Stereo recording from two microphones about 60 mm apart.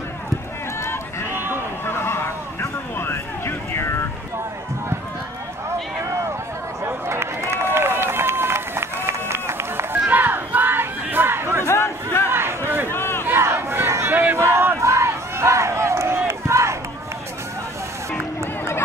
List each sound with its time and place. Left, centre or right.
1.3 s a sound: right
1.9 s a sound: left
2.6 s vehicle: left
6.8 s run: right
10.0 s crowd: right
11.6 s crowd: left
12.3 s a sound: right
12.9 s crowd: left
13.3 s a sound: right
14.1 s battle cry: right
14.8 s crowd: right
16.3 s battle cry: right